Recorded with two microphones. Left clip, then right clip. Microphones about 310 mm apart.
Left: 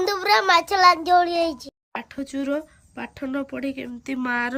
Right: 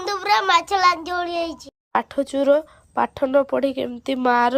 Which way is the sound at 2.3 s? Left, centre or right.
Centre.